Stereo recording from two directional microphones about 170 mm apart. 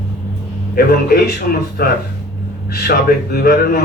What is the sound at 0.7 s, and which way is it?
A man's voice, 60° left (ahead or behind).